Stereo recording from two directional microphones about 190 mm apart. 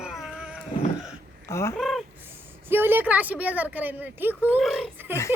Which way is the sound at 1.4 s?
15° left (ahead or behind).